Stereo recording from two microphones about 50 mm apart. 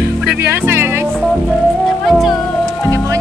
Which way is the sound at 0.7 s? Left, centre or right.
Right.